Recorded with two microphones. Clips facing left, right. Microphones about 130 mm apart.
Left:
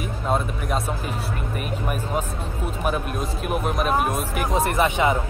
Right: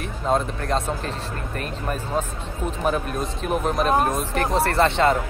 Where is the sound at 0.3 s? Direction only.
10° left (ahead or behind).